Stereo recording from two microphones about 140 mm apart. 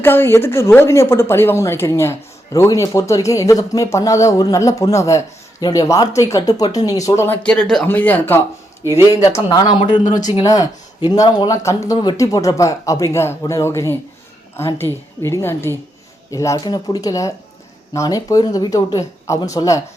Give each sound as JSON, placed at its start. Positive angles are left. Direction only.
{"t": 0.0, "sound": "speech", "side_deg": 15}
{"t": 9.3, "sound": "speech", "side_deg": 30}